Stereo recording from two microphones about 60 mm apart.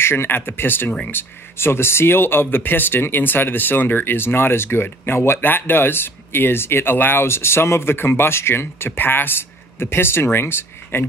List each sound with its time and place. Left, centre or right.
0.0 s speech: left